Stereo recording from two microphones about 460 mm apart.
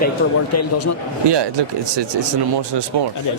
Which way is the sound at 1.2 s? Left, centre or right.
Right.